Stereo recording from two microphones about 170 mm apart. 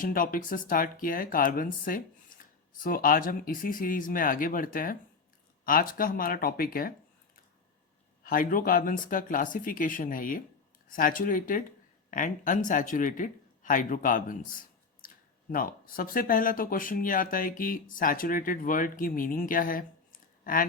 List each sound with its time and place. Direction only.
0.0 s speech: 55° left (ahead or behind)
8.2 s speech: 55° left (ahead or behind)